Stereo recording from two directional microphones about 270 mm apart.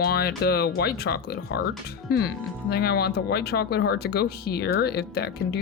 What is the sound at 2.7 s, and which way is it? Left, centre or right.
Speech, left.